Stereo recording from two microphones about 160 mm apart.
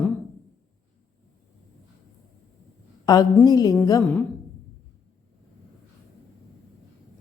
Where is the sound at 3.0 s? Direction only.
20° left (ahead or behind).